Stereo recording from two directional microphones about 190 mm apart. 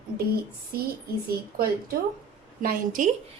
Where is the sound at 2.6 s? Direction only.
45° right (ahead or behind).